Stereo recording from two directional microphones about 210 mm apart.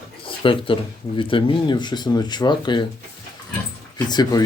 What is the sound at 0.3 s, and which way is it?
Speech, 25° left (ahead or behind).